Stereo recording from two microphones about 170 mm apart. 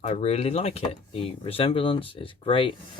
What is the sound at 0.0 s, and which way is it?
Speech, 40° left (ahead or behind).